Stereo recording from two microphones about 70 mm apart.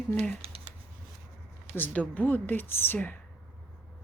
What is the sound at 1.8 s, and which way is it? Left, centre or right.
Speech, left.